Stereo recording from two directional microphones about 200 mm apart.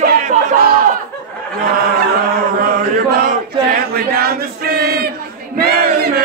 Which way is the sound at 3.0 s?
45° right (ahead or behind).